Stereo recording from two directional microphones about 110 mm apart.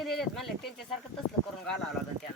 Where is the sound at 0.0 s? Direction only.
Centre (ahead or behind).